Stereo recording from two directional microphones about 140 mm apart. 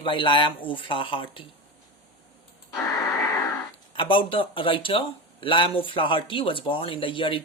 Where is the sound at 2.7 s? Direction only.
25° left (ahead or behind).